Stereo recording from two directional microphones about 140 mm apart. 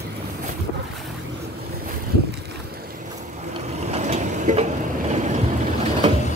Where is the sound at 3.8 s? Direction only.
55° right (ahead or behind).